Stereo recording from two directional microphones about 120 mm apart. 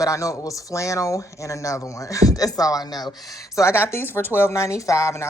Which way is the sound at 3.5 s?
20° left (ahead or behind).